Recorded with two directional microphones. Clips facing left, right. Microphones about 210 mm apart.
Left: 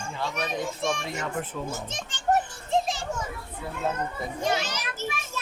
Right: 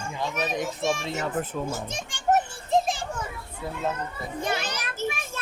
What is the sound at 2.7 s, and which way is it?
Children playing, 50° right (ahead or behind).